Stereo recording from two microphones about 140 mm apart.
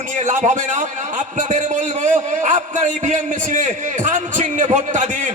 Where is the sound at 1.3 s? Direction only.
60° right (ahead or behind).